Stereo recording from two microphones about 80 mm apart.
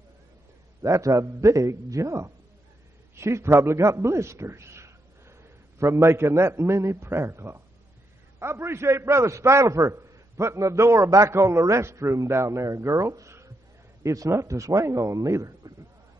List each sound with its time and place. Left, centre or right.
0.8 s a man's voice: right